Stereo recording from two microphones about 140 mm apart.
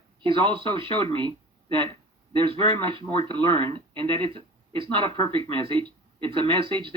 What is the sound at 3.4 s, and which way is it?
Speech, 35° right (ahead or behind).